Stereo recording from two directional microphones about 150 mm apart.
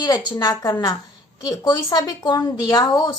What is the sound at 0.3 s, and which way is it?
Speech, 30° left (ahead or behind).